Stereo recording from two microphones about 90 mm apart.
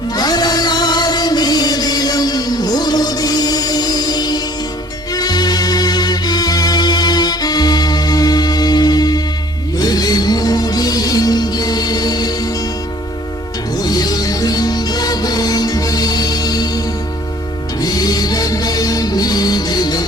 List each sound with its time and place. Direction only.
0.2 s music: 50° left (ahead or behind)
13.7 s music: 50° left (ahead or behind)